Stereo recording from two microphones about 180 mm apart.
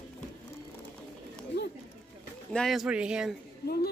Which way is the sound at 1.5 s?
75° left (ahead or behind).